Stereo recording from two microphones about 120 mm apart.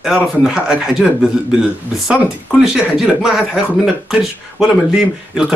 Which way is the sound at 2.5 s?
5° right (ahead or behind).